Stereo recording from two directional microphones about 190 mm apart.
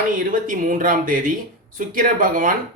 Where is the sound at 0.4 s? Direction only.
45° right (ahead or behind).